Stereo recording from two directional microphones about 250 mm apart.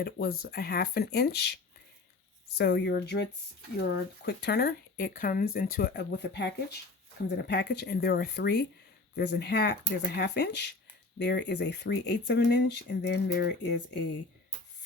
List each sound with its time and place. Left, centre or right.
0.0 s speech: left
2.6 s speech: left
4.3 s speech: left